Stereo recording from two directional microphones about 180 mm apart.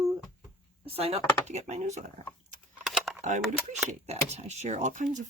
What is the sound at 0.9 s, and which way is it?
Speech, 30° right (ahead or behind).